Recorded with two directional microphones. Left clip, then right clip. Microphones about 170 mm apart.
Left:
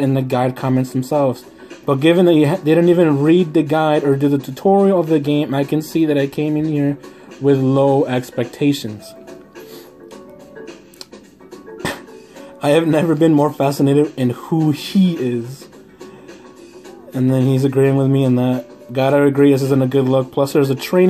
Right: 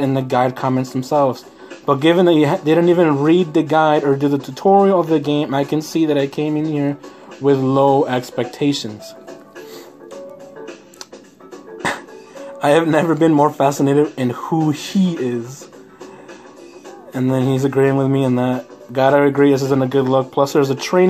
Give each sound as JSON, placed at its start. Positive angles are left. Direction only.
{"t": 0.0, "sound": "speech", "side_deg": 0}
{"t": 12.5, "sound": "speech", "side_deg": 0}
{"t": 17.1, "sound": "speech", "side_deg": 0}